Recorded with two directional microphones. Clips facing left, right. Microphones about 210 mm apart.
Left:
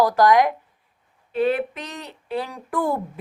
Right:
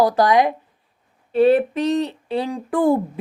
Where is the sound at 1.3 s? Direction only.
35° right (ahead or behind).